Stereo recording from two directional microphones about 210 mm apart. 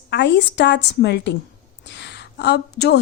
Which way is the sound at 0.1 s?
55° left (ahead or behind).